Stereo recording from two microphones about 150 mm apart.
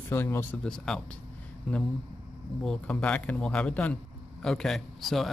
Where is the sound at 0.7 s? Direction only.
5° left (ahead or behind).